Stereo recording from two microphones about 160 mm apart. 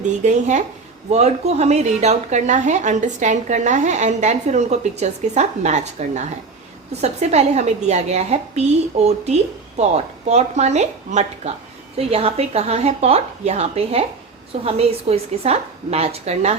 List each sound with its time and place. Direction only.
0.0 s a woman's voice: 50° right (ahead or behind)